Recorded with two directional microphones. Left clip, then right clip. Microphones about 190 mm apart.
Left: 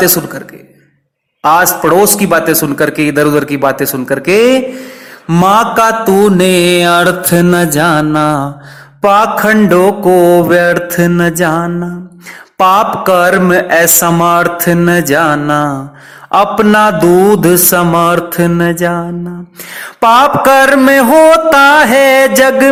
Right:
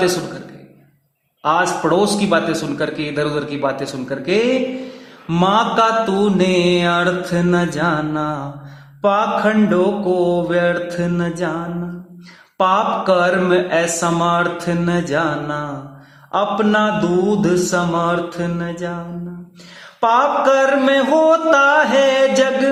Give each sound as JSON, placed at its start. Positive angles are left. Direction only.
{"t": 1.4, "sound": "mantra", "side_deg": 35}